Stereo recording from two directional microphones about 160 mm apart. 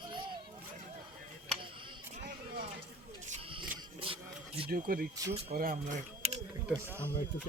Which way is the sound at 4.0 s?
35° right (ahead or behind).